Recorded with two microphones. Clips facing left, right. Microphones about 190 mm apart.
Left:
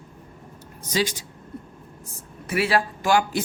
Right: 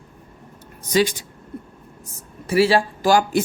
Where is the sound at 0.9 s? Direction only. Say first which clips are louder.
Right 6 dB; 55° right (ahead or behind).